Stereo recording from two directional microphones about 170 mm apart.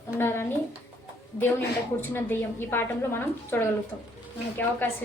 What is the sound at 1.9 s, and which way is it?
A woman's voice, 10° left (ahead or behind).